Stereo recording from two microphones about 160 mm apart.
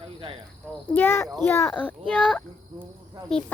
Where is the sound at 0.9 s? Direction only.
15° left (ahead or behind).